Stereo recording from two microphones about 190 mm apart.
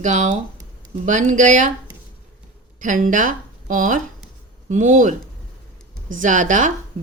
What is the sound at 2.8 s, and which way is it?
Speech, 45° right (ahead or behind).